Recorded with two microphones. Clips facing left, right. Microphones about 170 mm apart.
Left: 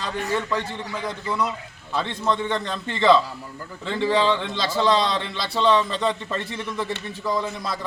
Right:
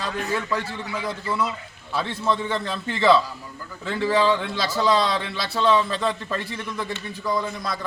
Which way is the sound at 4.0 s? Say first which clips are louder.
Even; 20° left (ahead or behind).